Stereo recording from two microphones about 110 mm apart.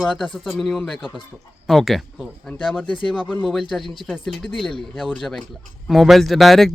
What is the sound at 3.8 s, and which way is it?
Speech, 50° left (ahead or behind).